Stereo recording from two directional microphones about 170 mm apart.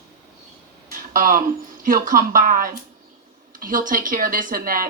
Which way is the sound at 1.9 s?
55° right (ahead or behind).